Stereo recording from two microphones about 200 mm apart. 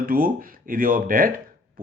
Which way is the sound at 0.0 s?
45° right (ahead or behind).